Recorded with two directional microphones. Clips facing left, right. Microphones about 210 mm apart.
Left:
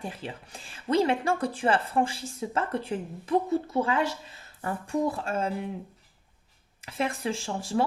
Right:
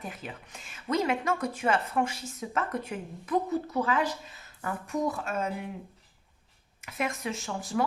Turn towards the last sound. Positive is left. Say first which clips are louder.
# left 3 dB
turn(degrees=30)  # may be behind; listen again after turning